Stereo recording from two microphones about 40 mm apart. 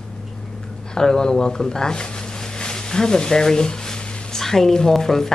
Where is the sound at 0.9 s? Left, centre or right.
Centre.